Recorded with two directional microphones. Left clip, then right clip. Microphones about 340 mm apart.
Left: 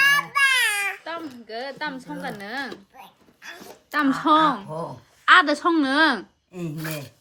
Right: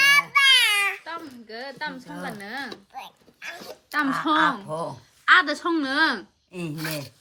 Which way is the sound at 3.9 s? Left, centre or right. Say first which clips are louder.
Left 4 dB; centre.